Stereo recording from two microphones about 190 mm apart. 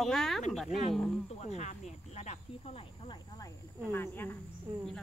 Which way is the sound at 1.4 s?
40° left (ahead or behind).